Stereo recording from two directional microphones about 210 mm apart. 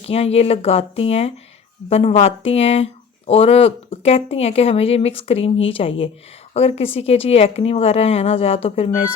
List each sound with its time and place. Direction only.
0.0 s speech: 30° left (ahead or behind)